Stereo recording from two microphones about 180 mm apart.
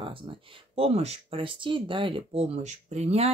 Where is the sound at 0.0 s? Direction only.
30° right (ahead or behind).